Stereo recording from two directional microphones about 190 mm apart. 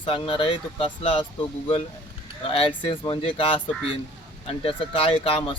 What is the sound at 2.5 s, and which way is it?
Speech, 30° left (ahead or behind).